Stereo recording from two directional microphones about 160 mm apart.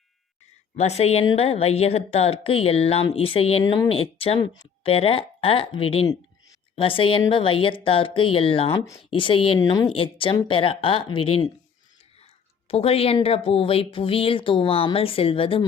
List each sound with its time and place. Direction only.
0.8 s speech: 40° left (ahead or behind)
12.6 s speech: 40° left (ahead or behind)